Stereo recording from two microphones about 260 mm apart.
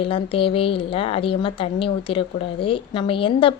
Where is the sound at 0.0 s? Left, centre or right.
Left.